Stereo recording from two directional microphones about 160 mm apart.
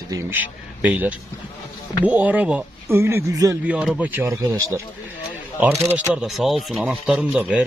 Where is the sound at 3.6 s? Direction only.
5° right (ahead or behind).